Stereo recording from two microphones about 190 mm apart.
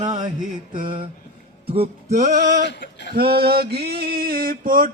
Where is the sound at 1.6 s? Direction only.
30° right (ahead or behind).